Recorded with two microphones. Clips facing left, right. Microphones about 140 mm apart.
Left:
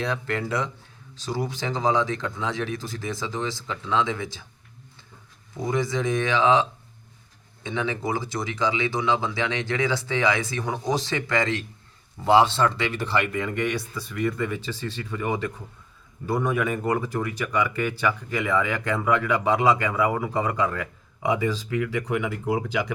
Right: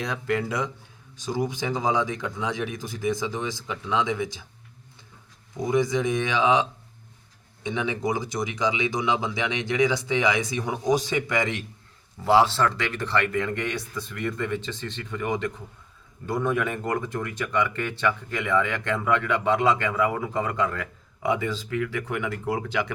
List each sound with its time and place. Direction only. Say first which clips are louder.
0.0 s speech: right 1 dB; 15° right (ahead or behind)
5.7 s speech: right 2 dB; 20° right (ahead or behind)
12.2 s speech: left 1 dB; 5° right (ahead or behind); by 22.8 s 10° left (ahead or behind)